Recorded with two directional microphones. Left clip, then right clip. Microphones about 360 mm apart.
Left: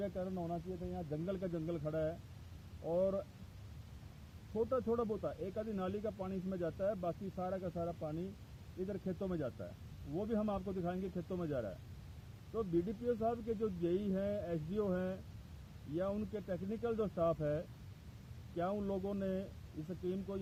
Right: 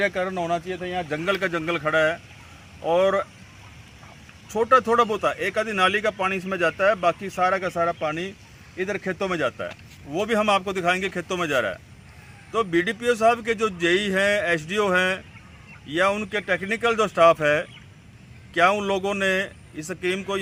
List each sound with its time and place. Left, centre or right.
0.0 s speech: centre
4.5 s speech: centre